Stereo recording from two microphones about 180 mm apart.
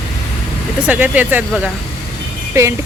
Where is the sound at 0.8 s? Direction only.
10° right (ahead or behind).